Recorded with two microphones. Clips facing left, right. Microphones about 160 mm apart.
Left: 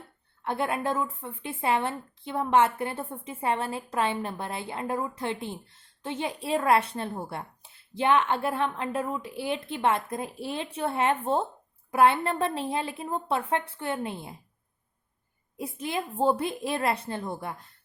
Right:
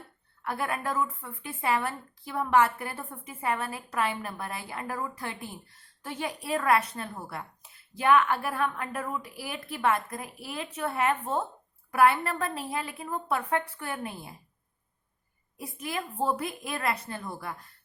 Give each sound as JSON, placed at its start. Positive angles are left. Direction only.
{"t": 0.4, "sound": "speech", "side_deg": 25}
{"t": 15.5, "sound": "speech", "side_deg": 25}